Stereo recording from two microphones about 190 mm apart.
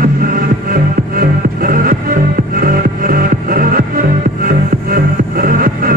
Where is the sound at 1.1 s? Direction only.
50° right (ahead or behind).